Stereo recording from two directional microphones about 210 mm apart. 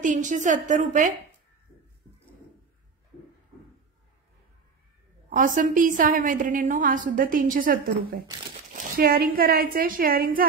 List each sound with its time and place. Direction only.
0.0 s a woman's voice: 35° right (ahead or behind)
5.3 s a woman's voice: 40° right (ahead or behind)